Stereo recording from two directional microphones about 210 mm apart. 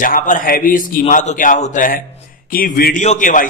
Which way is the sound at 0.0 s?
40° left (ahead or behind).